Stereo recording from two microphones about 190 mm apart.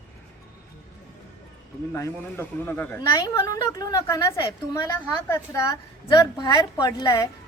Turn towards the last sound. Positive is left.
turn(degrees=15)  # may be behind; listen again after turning